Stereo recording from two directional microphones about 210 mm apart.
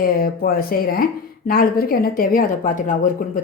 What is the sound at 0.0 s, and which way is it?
A woman's voice, 45° left (ahead or behind).